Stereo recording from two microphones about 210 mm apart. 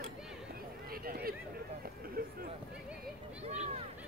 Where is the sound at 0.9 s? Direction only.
45° right (ahead or behind).